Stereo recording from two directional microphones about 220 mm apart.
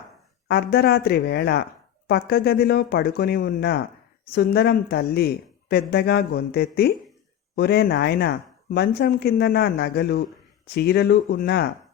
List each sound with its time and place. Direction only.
0.4 s speech: 45° left (ahead or behind)